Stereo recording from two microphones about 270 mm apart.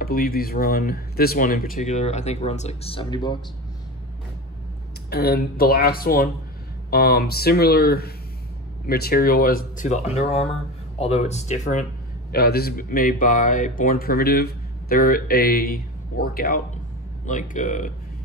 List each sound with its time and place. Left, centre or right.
0.0 s speech: left; by 3.3 s centre
5.1 s speech: left